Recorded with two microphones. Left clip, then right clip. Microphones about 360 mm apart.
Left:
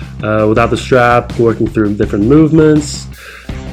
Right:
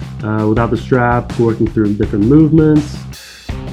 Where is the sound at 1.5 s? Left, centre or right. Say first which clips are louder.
Left 3 dB; left.